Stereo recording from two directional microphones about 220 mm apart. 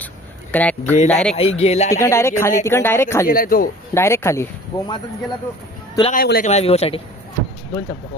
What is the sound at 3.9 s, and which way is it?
Speech, 10° left (ahead or behind).